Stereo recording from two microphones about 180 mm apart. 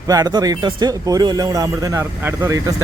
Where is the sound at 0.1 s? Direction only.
20° right (ahead or behind).